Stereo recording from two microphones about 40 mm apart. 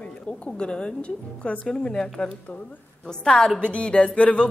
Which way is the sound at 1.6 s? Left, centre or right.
Left.